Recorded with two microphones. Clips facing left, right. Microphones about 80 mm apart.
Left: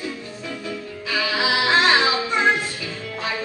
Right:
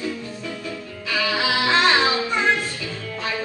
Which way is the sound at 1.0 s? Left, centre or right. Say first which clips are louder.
Even; centre.